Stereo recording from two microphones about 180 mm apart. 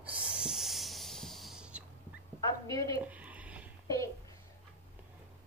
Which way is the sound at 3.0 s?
10° right (ahead or behind).